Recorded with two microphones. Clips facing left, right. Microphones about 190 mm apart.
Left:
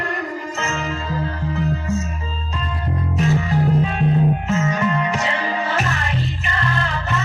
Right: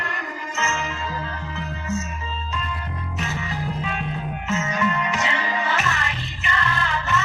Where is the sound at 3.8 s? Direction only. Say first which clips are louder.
Left 10 dB; 35° left (ahead or behind).